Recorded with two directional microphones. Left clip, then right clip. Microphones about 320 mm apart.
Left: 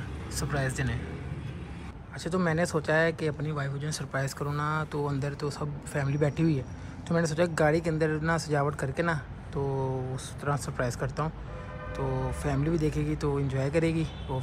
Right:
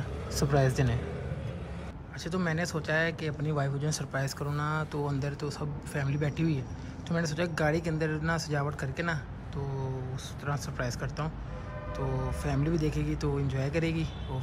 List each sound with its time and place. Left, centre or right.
0.3 s speech: centre
2.2 s speech: centre
10.4 s speech: centre